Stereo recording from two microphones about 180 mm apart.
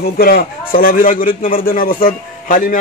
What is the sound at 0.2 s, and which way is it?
A man's voice, 55° left (ahead or behind).